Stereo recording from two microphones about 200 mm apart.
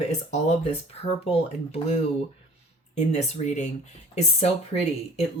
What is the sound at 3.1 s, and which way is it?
Speech, 35° left (ahead or behind).